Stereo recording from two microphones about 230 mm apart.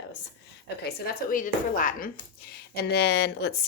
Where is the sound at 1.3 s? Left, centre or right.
Left.